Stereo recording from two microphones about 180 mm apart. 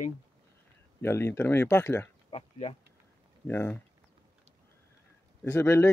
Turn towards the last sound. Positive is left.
turn(degrees=15)  # may be behind; listen again after turning